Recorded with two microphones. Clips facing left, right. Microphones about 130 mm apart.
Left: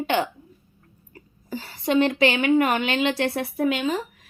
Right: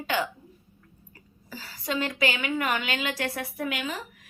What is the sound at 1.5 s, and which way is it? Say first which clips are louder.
A woman's voice: left 9 dB; 25° left (ahead or behind).